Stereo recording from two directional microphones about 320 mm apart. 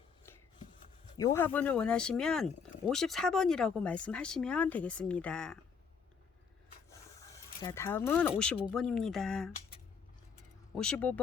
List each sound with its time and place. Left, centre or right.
1.1 s speech: centre
7.3 s speech: centre
10.8 s speech: centre